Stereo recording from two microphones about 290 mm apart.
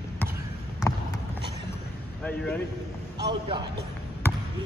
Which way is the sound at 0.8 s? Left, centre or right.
Centre.